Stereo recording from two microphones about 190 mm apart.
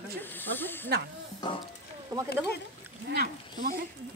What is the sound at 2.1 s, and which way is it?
Speech, 20° right (ahead or behind).